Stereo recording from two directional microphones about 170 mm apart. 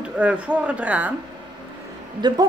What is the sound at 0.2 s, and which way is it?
Speech, 10° right (ahead or behind).